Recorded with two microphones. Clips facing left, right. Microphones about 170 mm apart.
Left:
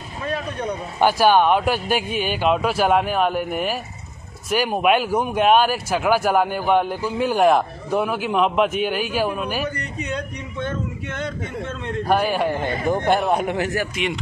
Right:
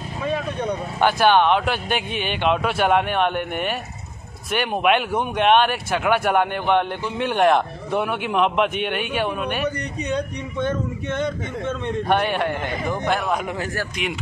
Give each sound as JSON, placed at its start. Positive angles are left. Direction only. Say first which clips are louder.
{"t": 0.9, "sound": "speech", "louder": "left 1 dB", "side_deg": 5}
{"t": 12.0, "sound": "a man's voice", "louder": "left 2 dB", "side_deg": 0}
{"t": 13.3, "sound": "speech", "louder": "left 4 dB", "side_deg": 30}
{"t": 13.9, "sound": "speech", "louder": "left 2 dB", "side_deg": 0}